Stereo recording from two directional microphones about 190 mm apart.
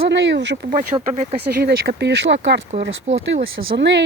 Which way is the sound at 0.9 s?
35° right (ahead or behind).